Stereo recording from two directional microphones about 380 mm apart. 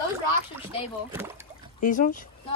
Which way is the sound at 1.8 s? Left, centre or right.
Left.